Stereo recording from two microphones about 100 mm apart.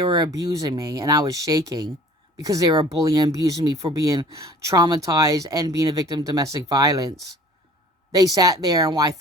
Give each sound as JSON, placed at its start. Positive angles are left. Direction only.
{"t": 0.3, "sound": "speech", "side_deg": -35}
{"t": 8.1, "sound": "speech", "side_deg": -35}